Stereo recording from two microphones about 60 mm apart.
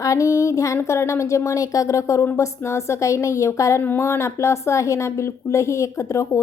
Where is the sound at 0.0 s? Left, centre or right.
Left.